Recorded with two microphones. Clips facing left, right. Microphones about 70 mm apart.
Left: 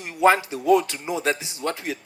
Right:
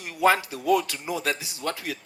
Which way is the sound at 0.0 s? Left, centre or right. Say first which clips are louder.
Left 3 dB; left.